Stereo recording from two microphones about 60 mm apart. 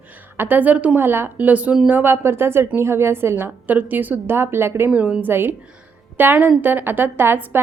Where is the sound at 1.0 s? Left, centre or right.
Right.